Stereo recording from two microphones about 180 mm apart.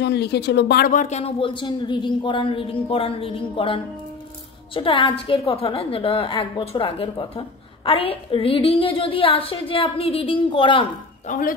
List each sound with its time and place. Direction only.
0.0 s a woman's voice: 70° left (ahead or behind); by 10.9 s 30° left (ahead or behind)
11.2 s speech: 50° left (ahead or behind)